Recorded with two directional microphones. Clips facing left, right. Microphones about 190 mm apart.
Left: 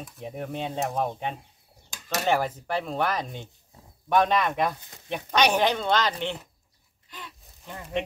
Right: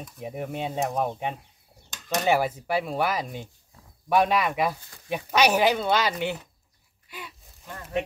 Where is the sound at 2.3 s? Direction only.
10° right (ahead or behind).